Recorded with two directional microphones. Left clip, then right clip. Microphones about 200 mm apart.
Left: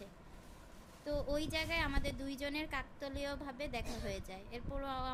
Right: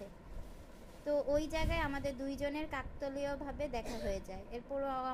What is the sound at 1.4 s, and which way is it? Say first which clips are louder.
A woman's voice: right 1 dB; 10° left (ahead or behind).